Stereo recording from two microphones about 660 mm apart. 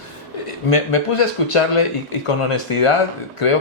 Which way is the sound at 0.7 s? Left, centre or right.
Left.